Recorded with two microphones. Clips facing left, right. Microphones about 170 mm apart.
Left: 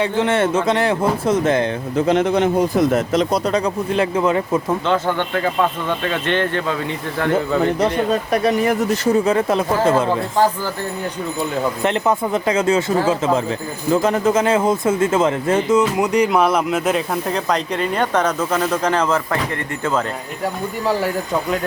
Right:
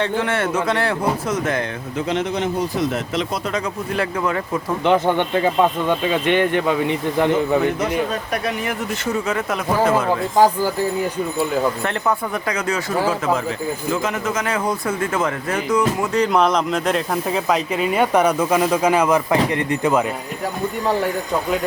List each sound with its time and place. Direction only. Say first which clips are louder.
0.2 s speech: left 4 dB; 25° left (ahead or behind)
2.0 s a man's voice: left 6 dB; 55° left (ahead or behind); by 3.6 s 40° left (ahead or behind)
3.9 s speech: left 4 dB; 20° left (ahead or behind)
4.9 s speech: right 5 dB; 20° right (ahead or behind)
8.3 s speech: left 7 dB; 30° left (ahead or behind)
10.3 s speech: right 4 dB; 10° right (ahead or behind)
11.8 s speech: left 4 dB; 20° left (ahead or behind); by 20.1 s 10° right (ahead or behind)